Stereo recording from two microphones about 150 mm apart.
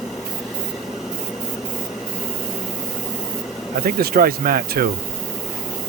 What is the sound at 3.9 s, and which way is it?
Speech, 90° right.